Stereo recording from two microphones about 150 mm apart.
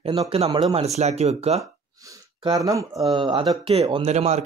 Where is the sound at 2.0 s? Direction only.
25° right (ahead or behind).